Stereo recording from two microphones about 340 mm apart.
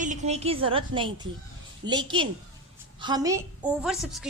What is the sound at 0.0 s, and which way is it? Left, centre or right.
A woman's voice, right.